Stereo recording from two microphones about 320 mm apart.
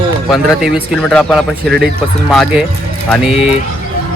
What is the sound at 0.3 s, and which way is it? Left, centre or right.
Speech, centre.